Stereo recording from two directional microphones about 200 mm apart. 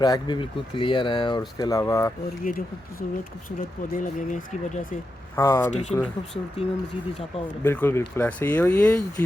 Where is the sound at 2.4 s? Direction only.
45° left (ahead or behind).